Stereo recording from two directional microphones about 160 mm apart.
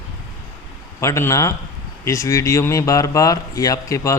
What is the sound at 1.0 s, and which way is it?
Speech, 20° left (ahead or behind).